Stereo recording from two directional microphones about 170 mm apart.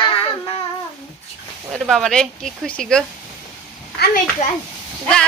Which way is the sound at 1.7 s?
Centre (ahead or behind).